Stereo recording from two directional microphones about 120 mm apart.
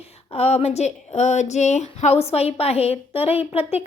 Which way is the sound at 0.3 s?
60° left (ahead or behind).